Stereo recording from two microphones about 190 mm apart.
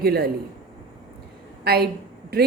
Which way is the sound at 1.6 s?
55° right (ahead or behind).